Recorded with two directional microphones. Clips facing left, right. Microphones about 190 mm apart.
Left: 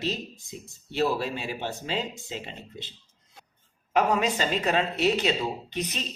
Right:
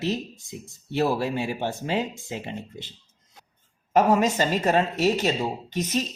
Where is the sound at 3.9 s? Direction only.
40° right (ahead or behind).